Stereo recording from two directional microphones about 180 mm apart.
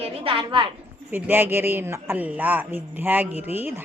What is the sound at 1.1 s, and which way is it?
A man's voice, 10° right (ahead or behind).